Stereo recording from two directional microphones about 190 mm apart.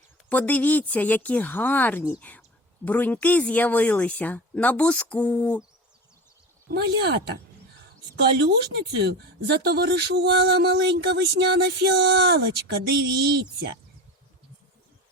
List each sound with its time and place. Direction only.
0.3 s speech: 10° left (ahead or behind)
6.7 s speech: 60° right (ahead or behind)